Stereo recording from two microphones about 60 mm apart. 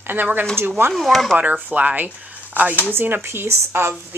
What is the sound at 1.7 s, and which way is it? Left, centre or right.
Speech, right.